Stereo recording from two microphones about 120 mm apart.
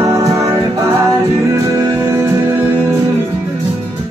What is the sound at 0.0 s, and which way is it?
Music, 25° right (ahead or behind).